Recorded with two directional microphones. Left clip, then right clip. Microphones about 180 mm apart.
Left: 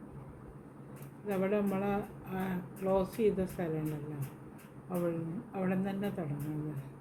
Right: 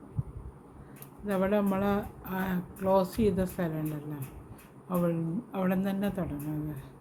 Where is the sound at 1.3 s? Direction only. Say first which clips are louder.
Right 4 dB; 90° right.